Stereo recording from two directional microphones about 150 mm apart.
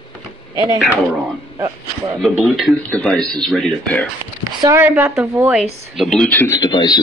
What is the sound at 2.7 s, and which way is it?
Speech, 10° left (ahead or behind).